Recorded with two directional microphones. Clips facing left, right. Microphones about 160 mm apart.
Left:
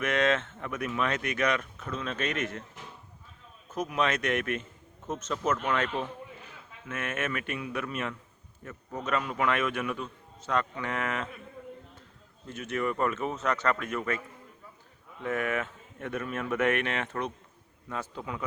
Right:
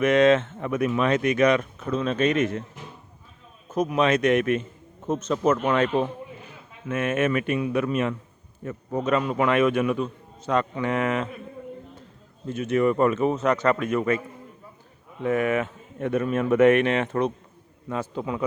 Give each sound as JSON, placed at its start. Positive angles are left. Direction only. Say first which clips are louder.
{"t": 0.0, "sound": "speech", "louder": "right 9 dB", "side_deg": -20}
{"t": 3.7, "sound": "a man's voice", "louder": "right 7 dB", "side_deg": -25}
{"t": 12.5, "sound": "speech", "louder": "right 9 dB", "side_deg": -20}